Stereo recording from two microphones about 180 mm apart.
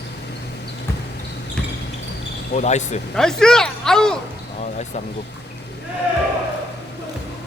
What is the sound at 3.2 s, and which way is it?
Speech, 5° left (ahead or behind).